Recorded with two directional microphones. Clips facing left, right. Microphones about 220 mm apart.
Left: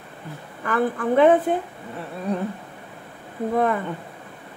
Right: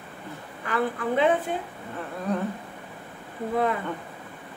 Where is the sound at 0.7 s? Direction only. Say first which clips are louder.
Left 4 dB; 50° left (ahead or behind).